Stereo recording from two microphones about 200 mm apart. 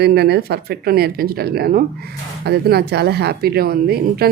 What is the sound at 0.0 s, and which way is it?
Speech, 55° right (ahead or behind).